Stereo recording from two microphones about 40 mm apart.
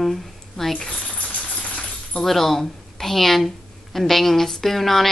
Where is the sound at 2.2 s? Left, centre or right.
Centre.